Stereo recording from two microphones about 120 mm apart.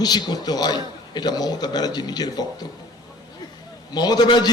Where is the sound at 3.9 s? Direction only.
35° left (ahead or behind).